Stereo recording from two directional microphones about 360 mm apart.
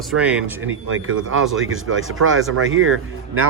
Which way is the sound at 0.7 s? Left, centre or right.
Right.